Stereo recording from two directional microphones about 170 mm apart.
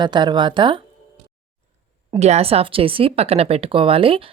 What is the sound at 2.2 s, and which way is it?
A woman's voice, 35° right (ahead or behind).